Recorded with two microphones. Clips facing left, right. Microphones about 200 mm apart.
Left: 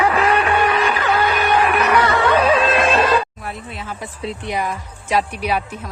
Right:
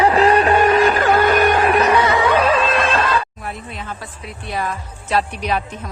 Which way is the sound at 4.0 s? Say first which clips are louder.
Left 6 dB; 25° left (ahead or behind).